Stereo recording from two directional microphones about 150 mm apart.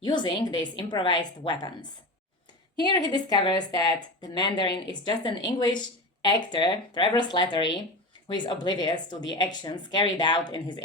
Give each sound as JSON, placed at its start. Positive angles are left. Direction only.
{"t": 0.0, "sound": "a woman's voice", "side_deg": 30}